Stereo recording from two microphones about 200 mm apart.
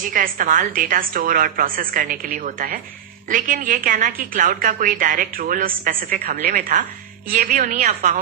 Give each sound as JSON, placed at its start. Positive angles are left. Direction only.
{"t": 0.1, "sound": "a woman's voice", "side_deg": -40}